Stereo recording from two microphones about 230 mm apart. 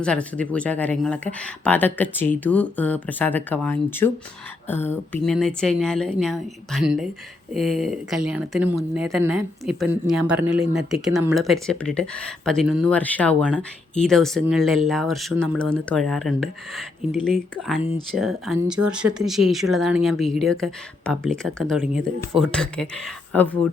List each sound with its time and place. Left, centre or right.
0.0 s speech: centre
18.8 s speech: right
19.2 s speech: centre